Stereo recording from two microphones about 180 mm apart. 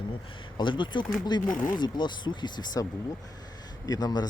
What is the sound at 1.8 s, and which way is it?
Speech, 25° left (ahead or behind).